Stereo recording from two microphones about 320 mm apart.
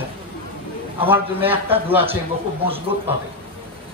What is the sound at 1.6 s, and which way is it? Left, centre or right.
Speech, centre.